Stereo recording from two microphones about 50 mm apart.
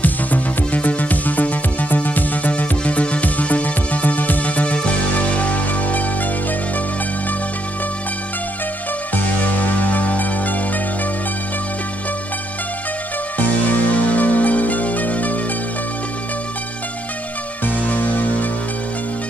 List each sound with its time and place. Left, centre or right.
0.0 s music: left
9.1 s music: left
13.4 s music: left
17.6 s music: left